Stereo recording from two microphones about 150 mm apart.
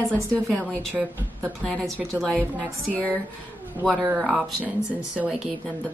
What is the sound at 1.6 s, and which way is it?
Speech, 5° left (ahead or behind).